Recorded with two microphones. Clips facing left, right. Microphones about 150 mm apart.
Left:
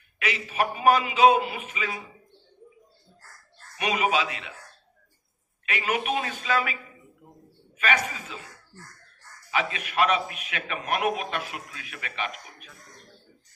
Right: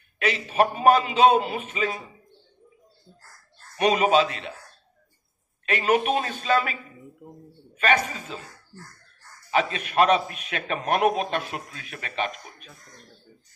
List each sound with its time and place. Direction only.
0.2 s a man's voice: 35° right (ahead or behind)
3.8 s a man's voice: 35° right (ahead or behind)
5.6 s a man's voice: 35° right (ahead or behind)
7.8 s a man's voice: 35° right (ahead or behind)
9.5 s a man's voice: 35° right (ahead or behind)